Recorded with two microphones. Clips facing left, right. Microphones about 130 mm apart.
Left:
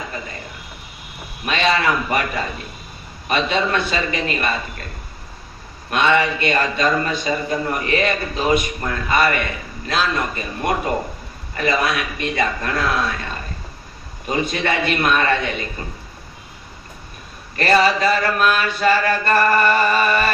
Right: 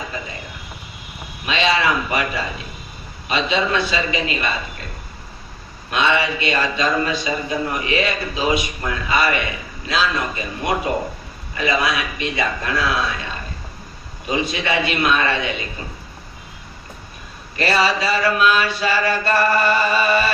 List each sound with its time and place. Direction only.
1.5 s speech: 50° left (ahead or behind)
5.9 s speech: 50° left (ahead or behind)
17.6 s speech: 50° left (ahead or behind)